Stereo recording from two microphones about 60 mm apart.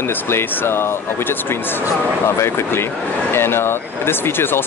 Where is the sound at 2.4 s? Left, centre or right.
Left.